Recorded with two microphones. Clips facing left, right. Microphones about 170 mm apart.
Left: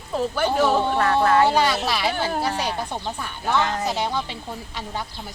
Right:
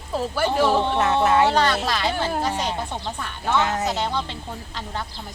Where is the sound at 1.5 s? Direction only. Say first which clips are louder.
Even; 10° left (ahead or behind).